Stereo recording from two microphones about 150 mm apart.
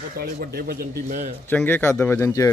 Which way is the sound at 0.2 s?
85° right.